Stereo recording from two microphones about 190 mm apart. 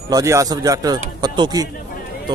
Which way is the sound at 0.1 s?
15° right (ahead or behind).